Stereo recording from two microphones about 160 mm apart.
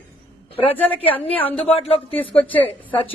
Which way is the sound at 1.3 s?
10° left (ahead or behind).